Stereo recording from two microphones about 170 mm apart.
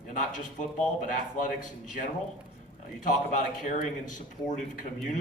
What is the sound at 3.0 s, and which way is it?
A man's voice, 50° left (ahead or behind).